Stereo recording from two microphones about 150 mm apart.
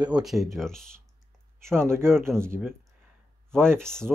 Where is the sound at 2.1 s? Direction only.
5° left (ahead or behind).